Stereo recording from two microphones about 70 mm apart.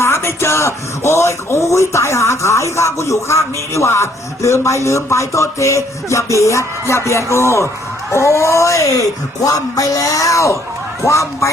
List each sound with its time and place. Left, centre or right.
0.0 s speech: left